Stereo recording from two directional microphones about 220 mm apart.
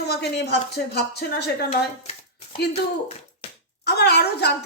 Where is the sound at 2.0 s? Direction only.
25° left (ahead or behind).